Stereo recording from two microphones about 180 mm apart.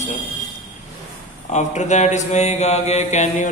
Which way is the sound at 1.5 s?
40° left (ahead or behind).